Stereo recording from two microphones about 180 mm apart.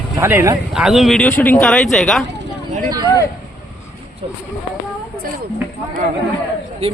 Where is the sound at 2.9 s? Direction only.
20° right (ahead or behind).